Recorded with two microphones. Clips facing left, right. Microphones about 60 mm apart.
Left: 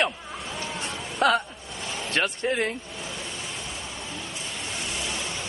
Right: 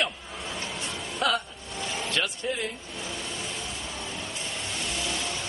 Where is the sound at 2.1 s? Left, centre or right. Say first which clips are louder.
Left 6 dB; left.